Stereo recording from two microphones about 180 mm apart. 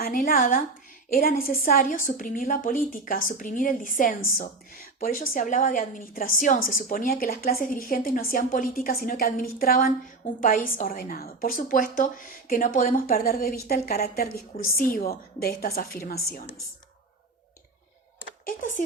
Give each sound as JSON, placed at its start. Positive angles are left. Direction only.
{"t": 0.0, "sound": "a woman's voice", "side_deg": 50}
{"t": 18.4, "sound": "a woman's voice", "side_deg": 45}